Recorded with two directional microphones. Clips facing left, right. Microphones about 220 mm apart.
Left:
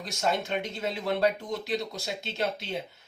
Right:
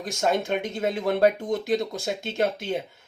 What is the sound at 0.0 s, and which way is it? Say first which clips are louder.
Speech: right 5 dB; 50° right (ahead or behind).